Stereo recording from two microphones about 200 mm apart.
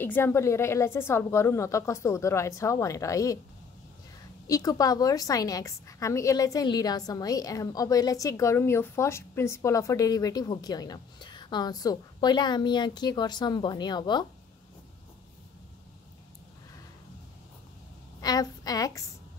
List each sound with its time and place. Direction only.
0.0 s a woman's voice: 10° left (ahead or behind)
4.5 s a woman's voice: 15° left (ahead or behind)
18.2 s a woman's voice: 20° left (ahead or behind)